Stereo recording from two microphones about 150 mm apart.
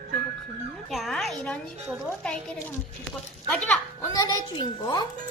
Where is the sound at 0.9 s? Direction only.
Centre (ahead or behind).